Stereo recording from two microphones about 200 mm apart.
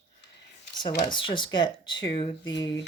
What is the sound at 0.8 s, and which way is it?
Speech, 25° left (ahead or behind).